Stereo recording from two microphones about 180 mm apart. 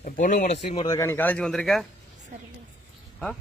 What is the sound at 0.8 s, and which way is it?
Speech, 20° left (ahead or behind).